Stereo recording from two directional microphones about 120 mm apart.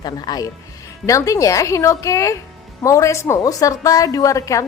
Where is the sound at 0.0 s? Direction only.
35° left (ahead or behind).